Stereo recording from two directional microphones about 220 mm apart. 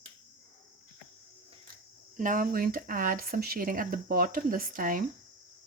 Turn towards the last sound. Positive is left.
turn(degrees=-40)  # may be behind; listen again after turning